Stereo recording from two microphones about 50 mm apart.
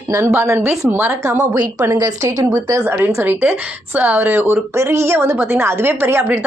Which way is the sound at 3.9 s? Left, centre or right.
Right.